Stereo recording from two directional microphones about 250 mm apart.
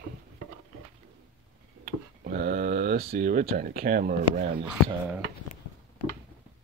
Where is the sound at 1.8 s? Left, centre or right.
Right.